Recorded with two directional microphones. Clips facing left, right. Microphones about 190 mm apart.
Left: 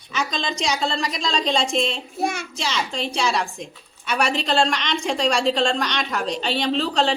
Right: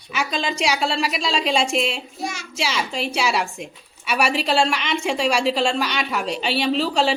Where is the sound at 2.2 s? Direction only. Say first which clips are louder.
Left 5 dB; 55° left (ahead or behind).